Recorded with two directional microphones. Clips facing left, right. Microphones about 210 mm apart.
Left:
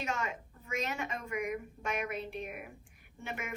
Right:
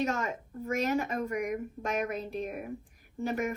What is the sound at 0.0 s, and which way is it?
Speech, 40° right (ahead or behind).